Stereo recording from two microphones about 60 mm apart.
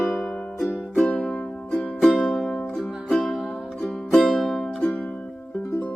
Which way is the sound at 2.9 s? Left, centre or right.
Centre.